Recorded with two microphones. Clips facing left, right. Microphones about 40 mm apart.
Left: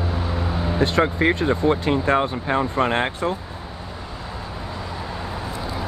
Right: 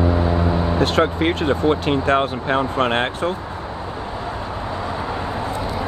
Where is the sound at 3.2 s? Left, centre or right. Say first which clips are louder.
Right 1 dB; right.